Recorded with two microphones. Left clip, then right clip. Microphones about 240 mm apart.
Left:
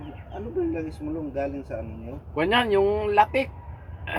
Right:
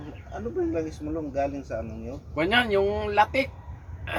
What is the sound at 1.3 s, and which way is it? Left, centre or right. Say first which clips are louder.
Speech: right 3 dB; centre.